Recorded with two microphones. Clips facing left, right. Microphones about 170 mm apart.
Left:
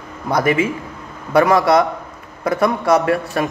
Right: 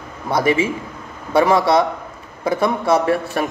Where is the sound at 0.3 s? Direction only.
25° right (ahead or behind).